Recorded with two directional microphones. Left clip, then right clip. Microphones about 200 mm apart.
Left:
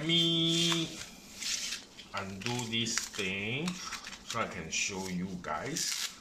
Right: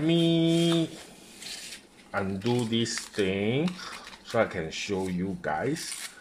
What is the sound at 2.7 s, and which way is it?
Speech, 50° right (ahead or behind).